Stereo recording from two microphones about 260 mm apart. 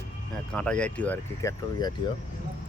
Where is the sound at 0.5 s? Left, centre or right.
Centre.